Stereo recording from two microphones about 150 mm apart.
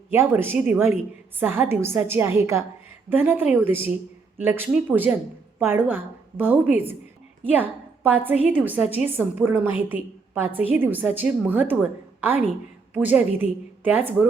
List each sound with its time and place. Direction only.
0.1 s a woman's voice: 15° right (ahead or behind)